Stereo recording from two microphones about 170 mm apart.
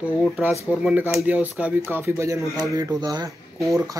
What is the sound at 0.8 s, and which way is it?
Speech, 10° right (ahead or behind).